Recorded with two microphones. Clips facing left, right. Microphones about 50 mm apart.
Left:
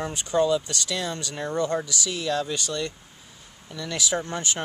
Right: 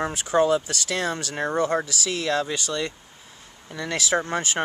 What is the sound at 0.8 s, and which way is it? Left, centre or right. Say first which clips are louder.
Speech: right 3 dB; right.